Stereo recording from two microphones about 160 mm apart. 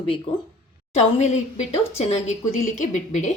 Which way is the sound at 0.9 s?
45° left (ahead or behind).